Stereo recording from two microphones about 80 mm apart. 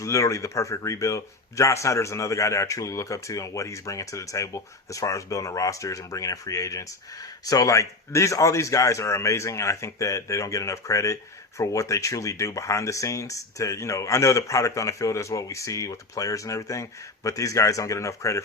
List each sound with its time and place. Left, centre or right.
0.0 s speech: left